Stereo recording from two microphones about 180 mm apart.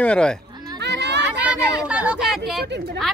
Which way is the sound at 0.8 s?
75° right (ahead or behind).